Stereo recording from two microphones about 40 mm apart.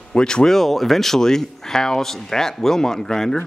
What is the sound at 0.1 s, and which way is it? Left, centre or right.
Speech, left.